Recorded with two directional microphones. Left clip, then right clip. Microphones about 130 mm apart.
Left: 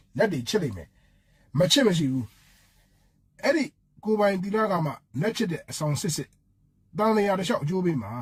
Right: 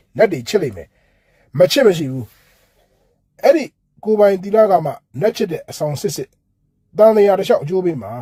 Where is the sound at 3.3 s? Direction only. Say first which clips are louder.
Right 12 dB; 35° right (ahead or behind).